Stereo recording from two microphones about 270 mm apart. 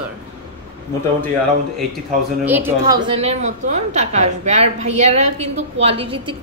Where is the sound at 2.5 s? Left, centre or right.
Centre.